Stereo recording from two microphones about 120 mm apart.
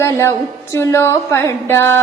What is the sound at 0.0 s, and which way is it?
Music, 25° left (ahead or behind).